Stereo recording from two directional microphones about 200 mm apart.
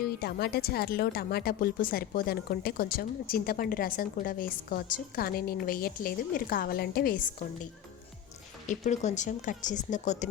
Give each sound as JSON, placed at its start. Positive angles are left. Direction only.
{"t": 0.2, "sound": "a woman's voice", "side_deg": 50}